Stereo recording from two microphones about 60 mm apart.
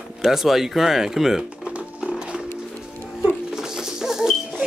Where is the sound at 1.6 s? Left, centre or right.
Centre.